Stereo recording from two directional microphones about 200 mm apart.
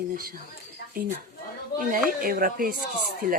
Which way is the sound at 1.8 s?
45° right (ahead or behind).